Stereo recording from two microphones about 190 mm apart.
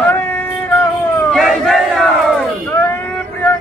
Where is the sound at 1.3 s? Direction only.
Centre (ahead or behind).